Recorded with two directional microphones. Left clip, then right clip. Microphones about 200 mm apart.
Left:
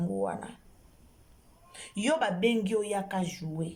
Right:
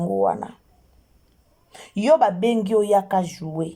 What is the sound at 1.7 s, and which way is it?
A woman's voice, 25° right (ahead or behind).